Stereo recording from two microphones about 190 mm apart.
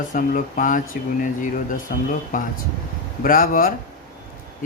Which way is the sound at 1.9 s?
45° left (ahead or behind).